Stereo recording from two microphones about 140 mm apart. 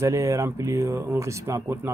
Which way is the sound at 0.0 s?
20° right (ahead or behind).